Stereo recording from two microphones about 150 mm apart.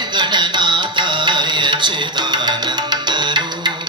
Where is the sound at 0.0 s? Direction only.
30° right (ahead or behind).